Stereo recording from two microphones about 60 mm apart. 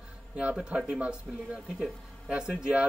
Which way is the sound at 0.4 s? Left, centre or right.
Centre.